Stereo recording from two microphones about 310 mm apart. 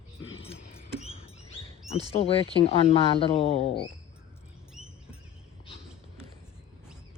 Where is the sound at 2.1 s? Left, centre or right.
Centre.